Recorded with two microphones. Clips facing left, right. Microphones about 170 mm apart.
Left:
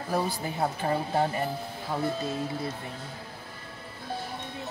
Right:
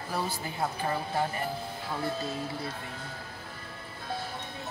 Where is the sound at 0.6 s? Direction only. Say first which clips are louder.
Left 3 dB; 30° left (ahead or behind).